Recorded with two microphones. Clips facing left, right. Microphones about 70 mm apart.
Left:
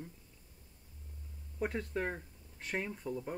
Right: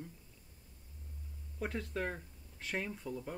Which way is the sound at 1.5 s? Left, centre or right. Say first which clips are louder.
Left 3 dB; centre.